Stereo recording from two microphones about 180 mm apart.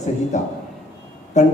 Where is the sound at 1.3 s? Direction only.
40° left (ahead or behind).